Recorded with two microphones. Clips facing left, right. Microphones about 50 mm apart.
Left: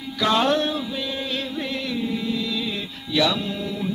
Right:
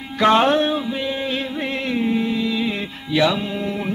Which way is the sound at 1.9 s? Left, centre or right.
Right.